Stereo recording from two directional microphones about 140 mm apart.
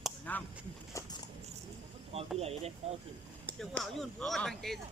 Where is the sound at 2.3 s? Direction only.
50° right (ahead or behind).